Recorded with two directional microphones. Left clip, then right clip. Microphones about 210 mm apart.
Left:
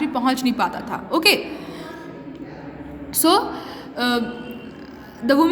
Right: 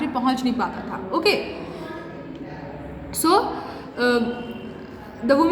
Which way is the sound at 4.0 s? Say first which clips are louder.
Right 2 dB; 35° left (ahead or behind).